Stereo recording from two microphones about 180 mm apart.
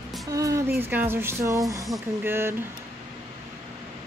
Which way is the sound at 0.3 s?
20° right (ahead or behind).